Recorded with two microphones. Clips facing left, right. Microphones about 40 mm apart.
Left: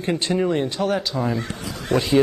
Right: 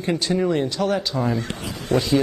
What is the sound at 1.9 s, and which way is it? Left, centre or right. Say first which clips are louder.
Speech: even; left.